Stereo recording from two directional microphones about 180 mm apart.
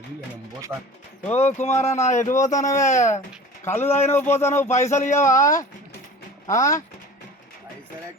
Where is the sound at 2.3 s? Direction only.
20° left (ahead or behind).